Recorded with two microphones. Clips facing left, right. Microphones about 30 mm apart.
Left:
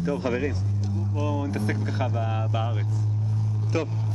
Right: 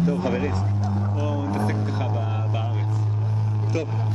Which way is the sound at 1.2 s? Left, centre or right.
Centre.